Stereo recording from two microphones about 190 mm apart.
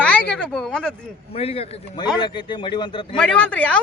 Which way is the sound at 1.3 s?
30° left (ahead or behind).